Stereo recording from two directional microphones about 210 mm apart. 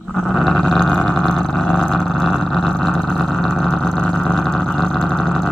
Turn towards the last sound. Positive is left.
turn(degrees=0)  # may be behind; listen again after turning